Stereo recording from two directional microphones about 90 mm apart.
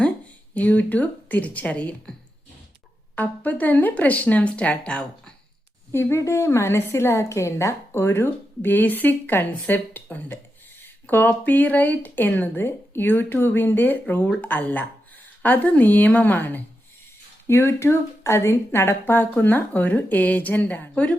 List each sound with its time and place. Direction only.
0.5 s speech: 15° left (ahead or behind)
3.2 s speech: 20° left (ahead or behind)
5.9 s speech: 30° left (ahead or behind)